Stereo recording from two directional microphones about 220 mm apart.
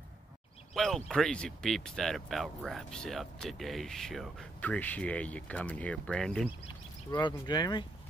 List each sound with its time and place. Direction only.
0.7 s speech: centre (ahead or behind)
7.1 s speech: 20° left (ahead or behind)